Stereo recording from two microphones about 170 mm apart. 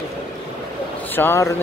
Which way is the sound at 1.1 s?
15° left (ahead or behind).